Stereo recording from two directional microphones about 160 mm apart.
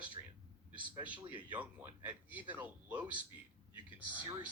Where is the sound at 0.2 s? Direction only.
25° right (ahead or behind).